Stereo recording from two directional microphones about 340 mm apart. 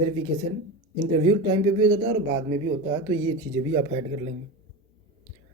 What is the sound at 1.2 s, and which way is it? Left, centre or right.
Speech, centre.